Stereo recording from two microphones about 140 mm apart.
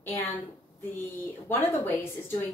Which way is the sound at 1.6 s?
15° left (ahead or behind).